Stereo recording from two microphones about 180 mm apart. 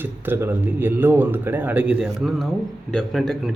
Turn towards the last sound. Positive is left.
turn(degrees=0)  # may be behind; listen again after turning